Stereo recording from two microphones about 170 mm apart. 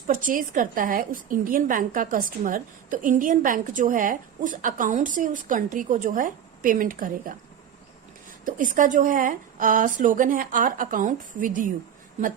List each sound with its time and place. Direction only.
0.1 s a woman's voice: 50° right (ahead or behind)
8.4 s a woman's voice: 50° right (ahead or behind)